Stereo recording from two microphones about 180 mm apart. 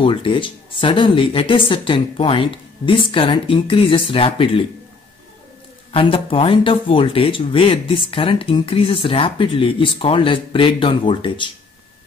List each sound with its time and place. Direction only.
0.0 s speech: 30° left (ahead or behind)
5.9 s speech: 30° left (ahead or behind)